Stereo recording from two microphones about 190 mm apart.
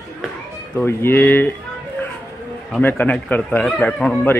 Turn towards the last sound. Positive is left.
turn(degrees=5)  # may be behind; listen again after turning